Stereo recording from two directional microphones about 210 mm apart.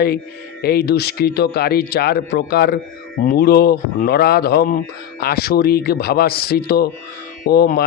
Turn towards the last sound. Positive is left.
turn(degrees=50)  # may be behind; listen again after turning